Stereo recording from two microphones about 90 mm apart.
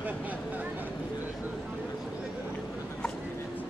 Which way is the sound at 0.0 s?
20° right (ahead or behind).